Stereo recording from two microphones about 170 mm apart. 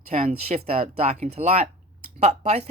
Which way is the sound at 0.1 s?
40° right (ahead or behind).